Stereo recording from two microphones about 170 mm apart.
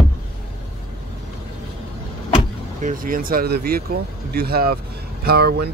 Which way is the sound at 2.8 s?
50° right (ahead or behind).